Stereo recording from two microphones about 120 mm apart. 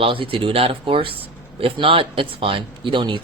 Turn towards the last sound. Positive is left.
turn(degrees=-40)  # may be behind; listen again after turning